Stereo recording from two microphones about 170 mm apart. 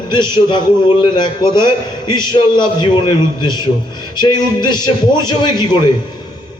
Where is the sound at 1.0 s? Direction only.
25° left (ahead or behind).